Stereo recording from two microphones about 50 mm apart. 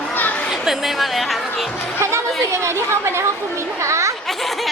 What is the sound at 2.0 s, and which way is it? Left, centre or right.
Speech, right.